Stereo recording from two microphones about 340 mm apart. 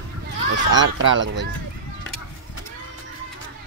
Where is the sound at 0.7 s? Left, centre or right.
Right.